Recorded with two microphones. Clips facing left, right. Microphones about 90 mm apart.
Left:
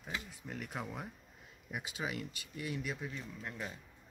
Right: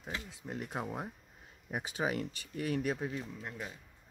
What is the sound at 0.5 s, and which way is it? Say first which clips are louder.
Speech: right 4 dB; 30° right (ahead or behind).